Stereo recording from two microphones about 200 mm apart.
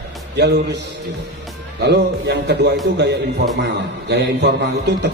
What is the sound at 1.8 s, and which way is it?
Speech, 55° right (ahead or behind).